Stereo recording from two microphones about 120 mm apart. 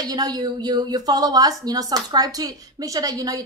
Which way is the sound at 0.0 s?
30° right (ahead or behind).